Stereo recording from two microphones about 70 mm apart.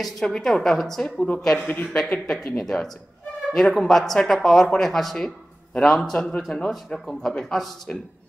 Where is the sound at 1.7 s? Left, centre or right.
Left.